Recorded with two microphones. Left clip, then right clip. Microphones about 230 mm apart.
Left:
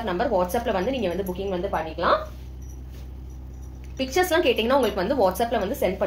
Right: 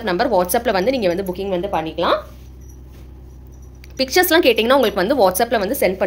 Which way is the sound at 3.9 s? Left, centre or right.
Right.